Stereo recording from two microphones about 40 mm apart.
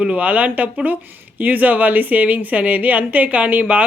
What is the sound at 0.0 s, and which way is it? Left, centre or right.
A woman's voice, right.